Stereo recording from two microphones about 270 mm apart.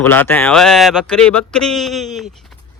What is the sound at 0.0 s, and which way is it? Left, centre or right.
Speech, centre.